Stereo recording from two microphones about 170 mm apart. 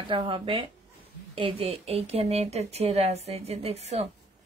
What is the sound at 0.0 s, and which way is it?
A woman's voice, 30° right (ahead or behind).